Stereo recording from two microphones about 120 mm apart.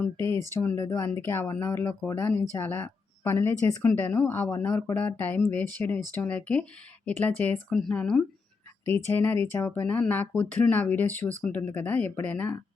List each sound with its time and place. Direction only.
0.0 s speech: 20° left (ahead or behind)